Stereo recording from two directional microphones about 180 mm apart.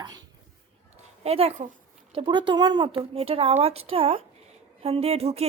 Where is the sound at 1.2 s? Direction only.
35° right (ahead or behind).